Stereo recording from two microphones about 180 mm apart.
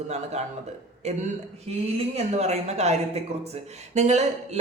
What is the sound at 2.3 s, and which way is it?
Speech, 40° right (ahead or behind).